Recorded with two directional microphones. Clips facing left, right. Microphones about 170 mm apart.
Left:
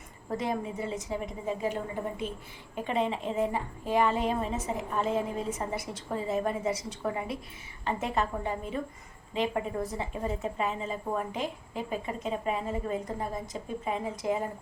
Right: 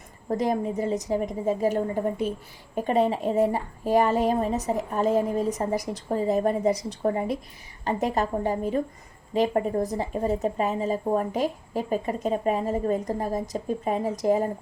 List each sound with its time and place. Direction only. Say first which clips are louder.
0.3 s a woman's voice: right 7 dB; 40° right (ahead or behind)